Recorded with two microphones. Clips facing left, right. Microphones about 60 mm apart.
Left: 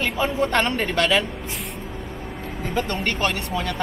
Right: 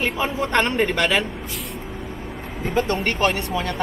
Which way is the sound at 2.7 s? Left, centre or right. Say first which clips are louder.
Right 4 dB; right.